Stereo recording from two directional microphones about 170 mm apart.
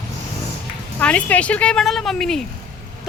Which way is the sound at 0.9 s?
10° left (ahead or behind).